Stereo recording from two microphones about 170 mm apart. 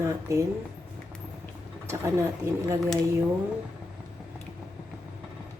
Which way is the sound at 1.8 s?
15° right (ahead or behind).